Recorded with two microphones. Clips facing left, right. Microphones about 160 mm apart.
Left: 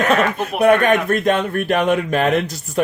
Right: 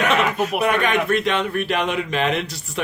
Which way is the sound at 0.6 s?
50° left (ahead or behind).